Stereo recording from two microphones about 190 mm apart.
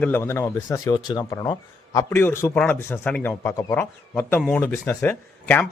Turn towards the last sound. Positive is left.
turn(degrees=10)  # may be behind; listen again after turning